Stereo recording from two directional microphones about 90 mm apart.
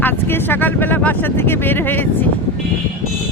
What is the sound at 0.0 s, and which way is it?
Speech, 25° left (ahead or behind).